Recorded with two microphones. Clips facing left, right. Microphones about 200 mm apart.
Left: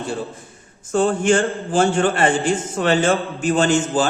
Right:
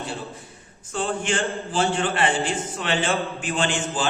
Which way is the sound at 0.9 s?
45° left (ahead or behind).